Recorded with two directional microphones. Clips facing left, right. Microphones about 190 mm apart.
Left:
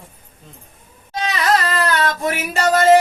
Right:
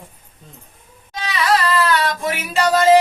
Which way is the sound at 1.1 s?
45° left (ahead or behind).